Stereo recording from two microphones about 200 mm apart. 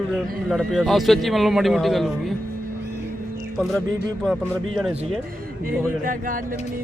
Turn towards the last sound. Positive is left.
turn(degrees=-45)  # may be behind; listen again after turning